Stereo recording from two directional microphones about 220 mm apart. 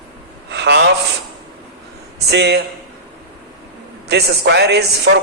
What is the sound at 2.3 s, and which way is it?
Speech, 50° right (ahead or behind).